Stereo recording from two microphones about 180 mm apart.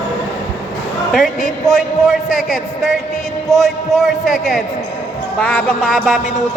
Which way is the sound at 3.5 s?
Centre (ahead or behind).